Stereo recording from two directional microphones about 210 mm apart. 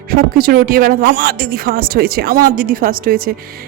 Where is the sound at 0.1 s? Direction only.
45° right (ahead or behind).